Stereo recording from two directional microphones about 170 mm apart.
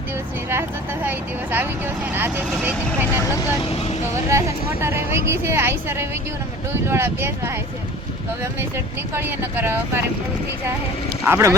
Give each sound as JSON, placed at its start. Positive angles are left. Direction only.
{"t": 1.0, "sound": "speech", "side_deg": -10}
{"t": 3.6, "sound": "speech", "side_deg": 35}
{"t": 4.3, "sound": "a woman's voice", "side_deg": -15}
{"t": 9.1, "sound": "a woman's voice", "side_deg": -15}
{"t": 11.3, "sound": "a woman's voice", "side_deg": -15}